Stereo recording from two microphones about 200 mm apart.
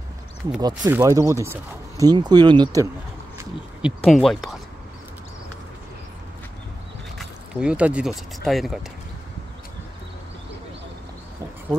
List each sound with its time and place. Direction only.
0.6 s speech: 15° right (ahead or behind)
4.0 s speech: centre (ahead or behind)
7.2 s speech: 5° right (ahead or behind)